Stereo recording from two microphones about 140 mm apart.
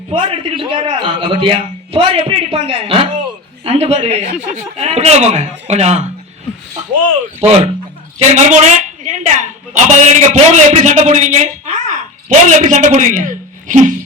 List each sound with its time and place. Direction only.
0.1 s a man's voice: 35° right (ahead or behind)
8.3 s a woman's voice: 55° right (ahead or behind)